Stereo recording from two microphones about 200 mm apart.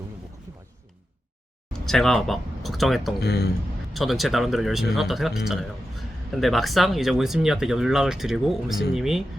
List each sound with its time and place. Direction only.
1.8 s speech: centre (ahead or behind)
3.2 s speech: 55° left (ahead or behind)
3.9 s speech: centre (ahead or behind)